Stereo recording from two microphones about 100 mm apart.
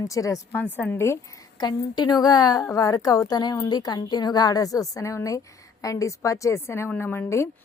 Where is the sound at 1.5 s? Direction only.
45° left (ahead or behind).